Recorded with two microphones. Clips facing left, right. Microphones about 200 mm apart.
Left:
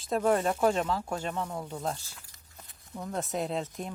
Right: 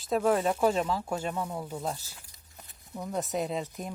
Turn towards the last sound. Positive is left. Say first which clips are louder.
# even
turn(degrees=0)  # may be behind; listen again after turning